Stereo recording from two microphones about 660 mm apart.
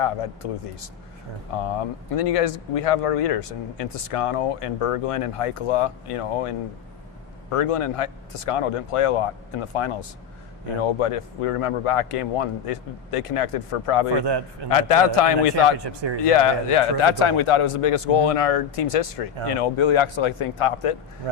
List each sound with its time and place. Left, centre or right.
0.4 s speech: left
2.1 s speech: left
7.5 s speech: left
14.2 s a man's voice: right
14.7 s speech: left
15.8 s a man's voice: right
16.2 s speech: left